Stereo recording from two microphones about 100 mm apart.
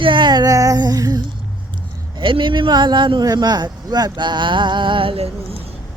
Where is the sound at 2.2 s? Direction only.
55° right (ahead or behind).